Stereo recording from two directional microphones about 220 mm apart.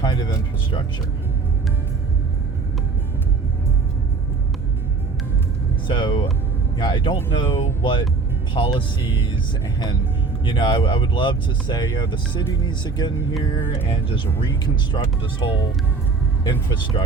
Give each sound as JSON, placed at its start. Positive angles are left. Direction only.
{"t": 0.0, "sound": "speech", "side_deg": 20}
{"t": 5.9, "sound": "speech", "side_deg": 20}
{"t": 10.4, "sound": "speech", "side_deg": 20}
{"t": 14.3, "sound": "speech", "side_deg": 20}